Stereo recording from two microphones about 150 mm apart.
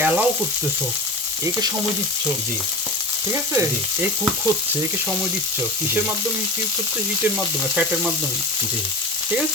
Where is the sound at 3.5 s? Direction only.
20° right (ahead or behind).